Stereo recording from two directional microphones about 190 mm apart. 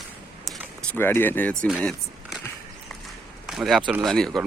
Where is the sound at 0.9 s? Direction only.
10° left (ahead or behind).